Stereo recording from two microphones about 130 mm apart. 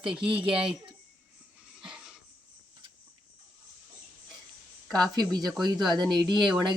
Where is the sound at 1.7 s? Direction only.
5° right (ahead or behind).